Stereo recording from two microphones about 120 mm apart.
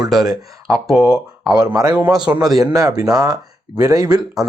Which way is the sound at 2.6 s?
30° right (ahead or behind).